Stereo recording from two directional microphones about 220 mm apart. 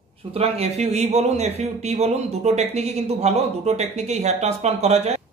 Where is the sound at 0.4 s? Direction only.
30° right (ahead or behind).